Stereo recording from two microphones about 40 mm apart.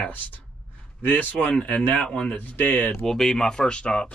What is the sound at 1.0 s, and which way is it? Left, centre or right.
Speech, left.